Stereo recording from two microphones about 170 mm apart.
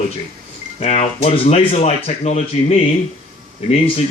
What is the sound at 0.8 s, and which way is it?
A man's voice, 40° left (ahead or behind).